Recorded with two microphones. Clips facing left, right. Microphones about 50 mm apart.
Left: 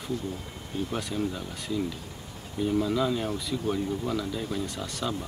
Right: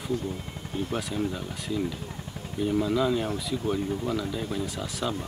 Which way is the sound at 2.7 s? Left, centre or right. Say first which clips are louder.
Right 2 dB; centre.